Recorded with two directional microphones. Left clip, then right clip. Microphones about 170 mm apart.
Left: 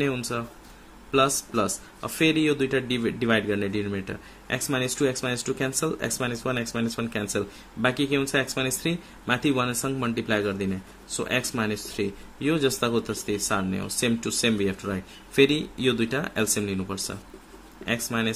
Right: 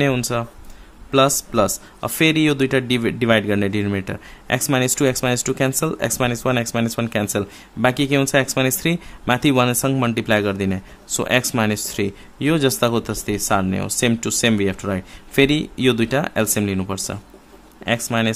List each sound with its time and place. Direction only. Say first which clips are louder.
0.0 s a man's voice: right 8 dB; 45° right (ahead or behind)